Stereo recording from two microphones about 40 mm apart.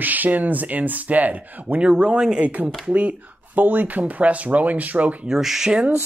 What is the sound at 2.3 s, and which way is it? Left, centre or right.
Speech, right.